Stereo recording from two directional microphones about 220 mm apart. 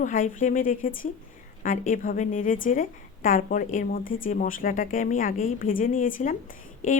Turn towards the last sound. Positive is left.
turn(degrees=35)  # may be behind; listen again after turning